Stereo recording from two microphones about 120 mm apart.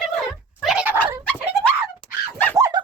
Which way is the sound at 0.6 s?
Centre (ahead or behind).